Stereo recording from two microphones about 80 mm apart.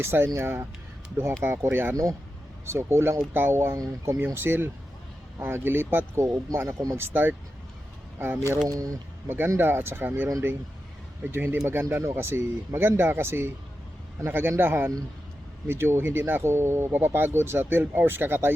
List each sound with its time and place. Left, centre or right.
0.0 s speech: right
3.8 s speech: right
4.4 s speech: right
8.6 s speech: right
9.2 s speech: right